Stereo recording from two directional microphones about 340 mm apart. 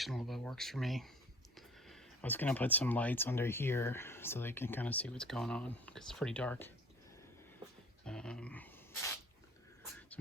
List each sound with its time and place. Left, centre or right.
0.0 s speech: centre
8.0 s speech: centre